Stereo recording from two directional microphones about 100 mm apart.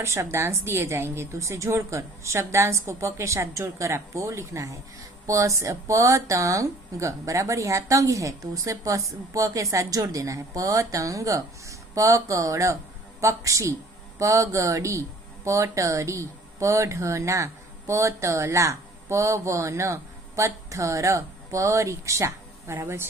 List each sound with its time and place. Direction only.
0.0 s a woman's voice: 30° right (ahead or behind)